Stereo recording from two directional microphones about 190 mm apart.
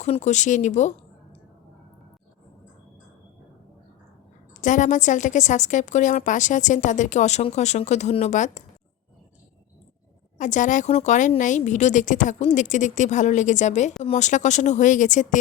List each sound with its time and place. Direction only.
0.0 s a woman's voice: 35° left (ahead or behind)
4.6 s a woman's voice: 40° left (ahead or behind)
10.3 s a woman's voice: 40° left (ahead or behind)